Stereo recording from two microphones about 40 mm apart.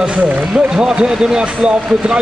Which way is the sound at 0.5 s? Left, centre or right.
Right.